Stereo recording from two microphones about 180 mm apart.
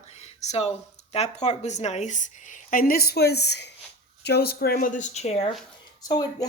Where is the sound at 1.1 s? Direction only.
35° left (ahead or behind).